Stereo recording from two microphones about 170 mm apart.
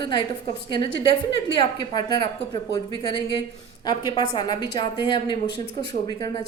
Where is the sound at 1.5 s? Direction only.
25° left (ahead or behind).